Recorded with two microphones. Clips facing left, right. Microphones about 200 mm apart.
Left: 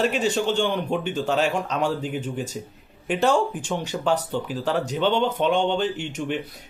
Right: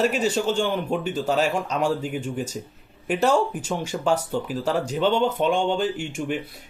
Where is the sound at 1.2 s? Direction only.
40° right (ahead or behind).